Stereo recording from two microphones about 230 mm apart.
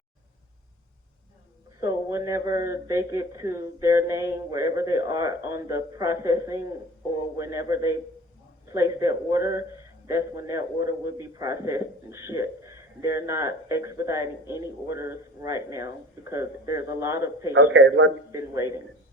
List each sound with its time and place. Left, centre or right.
1.8 s a man's voice: centre
17.7 s a man's voice: right
18.3 s a man's voice: centre